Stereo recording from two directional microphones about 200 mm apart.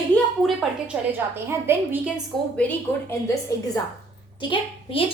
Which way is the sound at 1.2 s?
10° right (ahead or behind).